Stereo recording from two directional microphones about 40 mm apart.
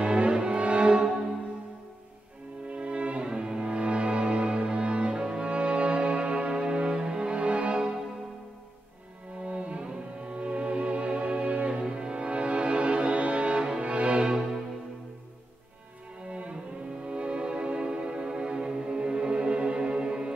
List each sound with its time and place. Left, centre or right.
0.0 s cello: right
2.7 s music: right
9.4 s music: right
16.3 s cello: right
17.0 s music: right